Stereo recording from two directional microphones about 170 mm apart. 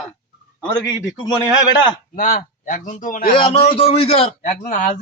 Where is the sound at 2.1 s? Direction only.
50° left (ahead or behind).